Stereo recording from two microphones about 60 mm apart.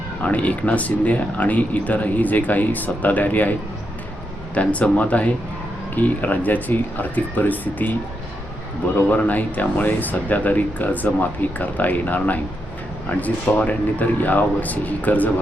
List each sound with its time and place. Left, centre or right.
0.2 s speech: left
4.5 s speech: left
9.0 s speech: left